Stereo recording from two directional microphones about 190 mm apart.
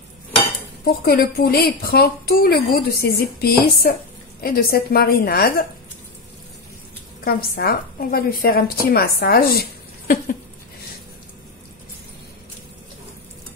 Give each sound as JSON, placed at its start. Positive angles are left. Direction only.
{"t": 0.8, "sound": "a woman's voice", "side_deg": 55}
{"t": 7.2, "sound": "a woman's voice", "side_deg": 50}